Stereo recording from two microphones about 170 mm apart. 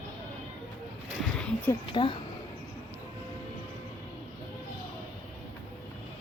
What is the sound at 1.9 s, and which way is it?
Speech, 30° left (ahead or behind).